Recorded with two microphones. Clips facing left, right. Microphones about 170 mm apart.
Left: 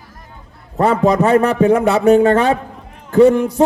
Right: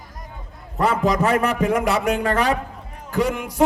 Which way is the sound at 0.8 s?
30° left (ahead or behind).